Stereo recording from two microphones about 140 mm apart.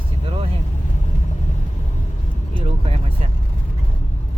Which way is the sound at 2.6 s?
50° right (ahead or behind).